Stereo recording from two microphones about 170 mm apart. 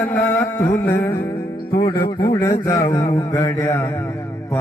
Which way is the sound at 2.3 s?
20° left (ahead or behind).